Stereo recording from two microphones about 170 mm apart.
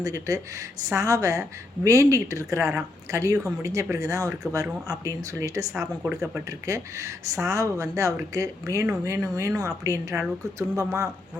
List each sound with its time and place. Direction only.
0.0 s speech: 20° right (ahead or behind)